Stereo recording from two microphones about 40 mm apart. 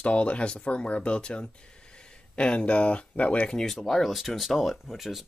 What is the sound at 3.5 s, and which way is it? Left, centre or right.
Speech, centre.